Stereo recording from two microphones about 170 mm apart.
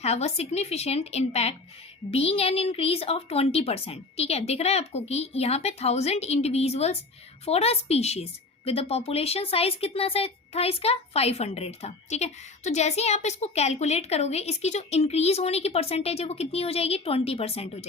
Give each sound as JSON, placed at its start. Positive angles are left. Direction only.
{"t": 0.0, "sound": "a woman's voice", "side_deg": 40}